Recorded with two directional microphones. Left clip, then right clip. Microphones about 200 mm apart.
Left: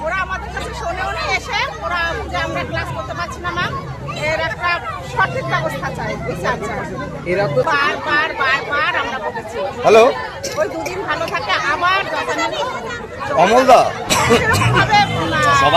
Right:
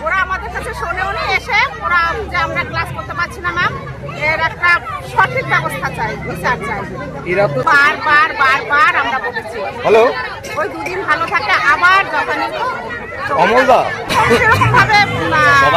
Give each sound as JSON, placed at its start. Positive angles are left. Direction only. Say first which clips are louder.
{"t": 0.1, "sound": "a sound", "louder": "right 7 dB", "side_deg": -10}
{"t": 1.2, "sound": "vehicle", "louder": "right 6 dB", "side_deg": -5}
{"t": 7.7, "sound": "speech", "louder": "right 6 dB", "side_deg": -10}
{"t": 9.8, "sound": "speech", "louder": "left 1 dB", "side_deg": 15}
{"t": 11.1, "sound": "speech", "louder": "right 6 dB", "side_deg": 0}
{"t": 13.3, "sound": "speech", "louder": "even", "side_deg": 15}
{"t": 14.4, "sound": "speech", "louder": "right 5 dB", "side_deg": -10}